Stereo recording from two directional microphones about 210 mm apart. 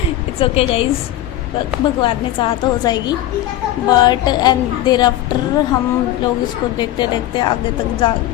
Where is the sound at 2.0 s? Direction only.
25° left (ahead or behind).